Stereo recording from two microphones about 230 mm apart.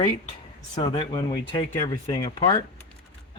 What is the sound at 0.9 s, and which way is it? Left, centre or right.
Speech, left.